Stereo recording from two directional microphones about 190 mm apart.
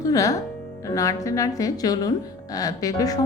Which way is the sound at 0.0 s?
15° left (ahead or behind).